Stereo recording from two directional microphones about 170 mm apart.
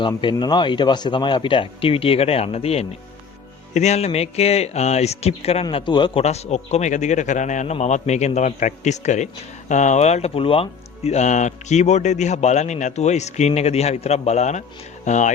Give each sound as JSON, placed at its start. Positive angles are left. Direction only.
{"t": 0.2, "sound": "speech", "side_deg": 25}
{"t": 6.2, "sound": "a man's voice", "side_deg": 40}